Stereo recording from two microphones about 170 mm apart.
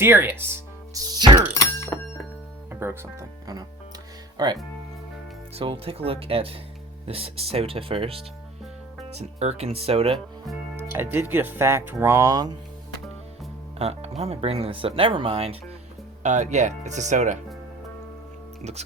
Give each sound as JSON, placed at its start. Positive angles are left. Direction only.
{"t": 0.0, "sound": "speech", "side_deg": -15}
{"t": 0.9, "sound": "music", "side_deg": -20}
{"t": 1.5, "sound": "thunk", "side_deg": 15}
{"t": 2.6, "sound": "speech", "side_deg": -15}
{"t": 5.5, "sound": "speech", "side_deg": -35}
{"t": 10.8, "sound": "speech", "side_deg": -15}
{"t": 13.7, "sound": "speech", "side_deg": -40}
{"t": 16.2, "sound": "speech", "side_deg": -45}
{"t": 18.6, "sound": "speech", "side_deg": -40}